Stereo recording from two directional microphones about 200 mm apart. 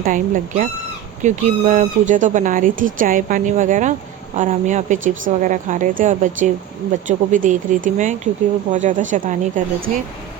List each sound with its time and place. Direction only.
0.0 s speech: 40° right (ahead or behind)